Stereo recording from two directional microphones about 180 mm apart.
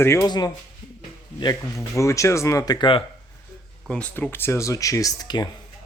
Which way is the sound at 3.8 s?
5° left (ahead or behind).